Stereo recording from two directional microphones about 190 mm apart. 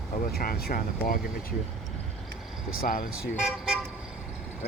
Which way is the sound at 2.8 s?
45° left (ahead or behind).